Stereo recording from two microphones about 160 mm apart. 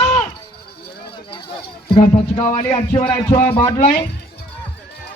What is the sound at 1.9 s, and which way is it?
Speech, 40° left (ahead or behind).